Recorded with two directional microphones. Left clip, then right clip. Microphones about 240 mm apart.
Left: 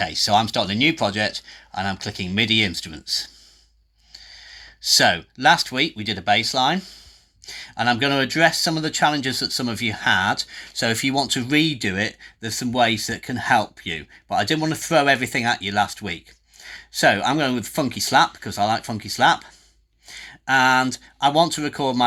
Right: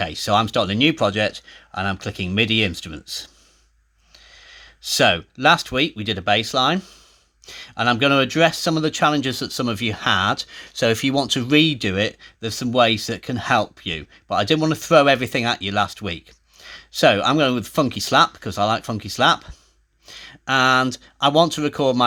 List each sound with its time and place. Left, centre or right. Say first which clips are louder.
0.0 s speech: left 1 dB; right
20.1 s a sound: left 1 dB; right
20.5 s speech: even; right